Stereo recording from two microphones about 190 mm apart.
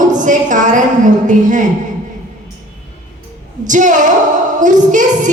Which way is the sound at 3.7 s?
40° right (ahead or behind).